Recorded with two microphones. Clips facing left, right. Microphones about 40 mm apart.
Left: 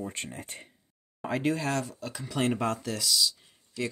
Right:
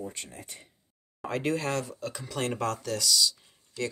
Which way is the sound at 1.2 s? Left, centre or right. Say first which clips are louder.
Left 1 dB; centre.